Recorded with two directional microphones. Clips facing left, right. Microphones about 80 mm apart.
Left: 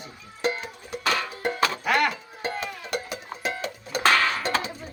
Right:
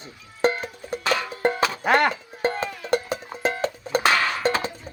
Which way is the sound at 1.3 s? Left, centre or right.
Right.